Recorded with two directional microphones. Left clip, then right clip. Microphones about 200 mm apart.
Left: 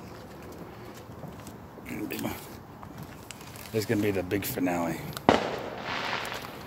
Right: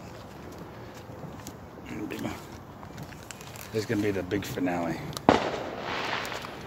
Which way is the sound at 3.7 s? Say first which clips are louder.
Left 1 dB; 40° left (ahead or behind).